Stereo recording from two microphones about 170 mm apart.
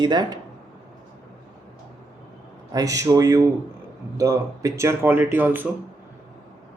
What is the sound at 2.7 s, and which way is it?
Speech, 20° right (ahead or behind).